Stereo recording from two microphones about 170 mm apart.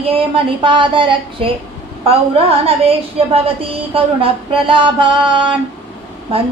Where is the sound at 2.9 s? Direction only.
35° right (ahead or behind).